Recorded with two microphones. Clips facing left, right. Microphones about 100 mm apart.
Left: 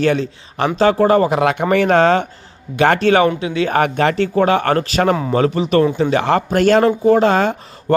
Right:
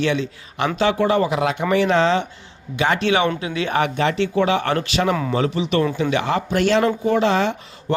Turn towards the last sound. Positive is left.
turn(degrees=50)  # may be behind; listen again after turning